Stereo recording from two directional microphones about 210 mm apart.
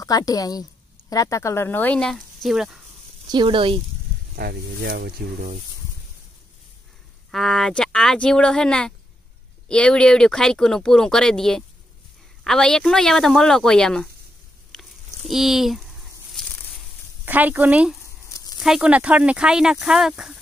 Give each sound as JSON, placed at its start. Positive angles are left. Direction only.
{"t": 0.0, "sound": "speech", "side_deg": 15}
{"t": 3.3, "sound": "speech", "side_deg": -20}
{"t": 4.4, "sound": "speech", "side_deg": -45}
{"t": 7.2, "sound": "speech", "side_deg": 0}
{"t": 14.7, "sound": "a sound", "side_deg": 0}
{"t": 15.2, "sound": "speech", "side_deg": 0}
{"t": 17.2, "sound": "speech", "side_deg": -10}